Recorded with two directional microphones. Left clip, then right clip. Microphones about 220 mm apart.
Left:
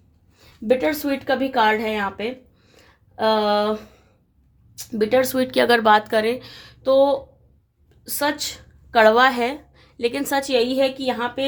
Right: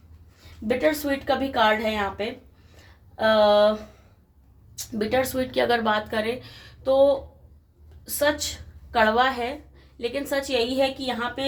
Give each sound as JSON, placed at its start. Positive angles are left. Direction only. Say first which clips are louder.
{"t": 0.8, "sound": "speech", "louder": "left 1 dB", "side_deg": 45}
{"t": 4.9, "sound": "a woman's voice", "louder": "left 5 dB", "side_deg": 40}